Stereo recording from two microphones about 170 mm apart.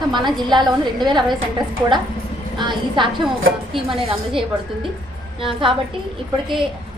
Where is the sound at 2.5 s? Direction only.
25° right (ahead or behind).